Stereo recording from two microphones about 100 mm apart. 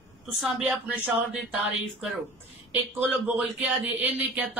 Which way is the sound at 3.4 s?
20° right (ahead or behind).